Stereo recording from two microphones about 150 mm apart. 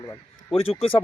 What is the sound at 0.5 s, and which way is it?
Speech, 40° left (ahead or behind).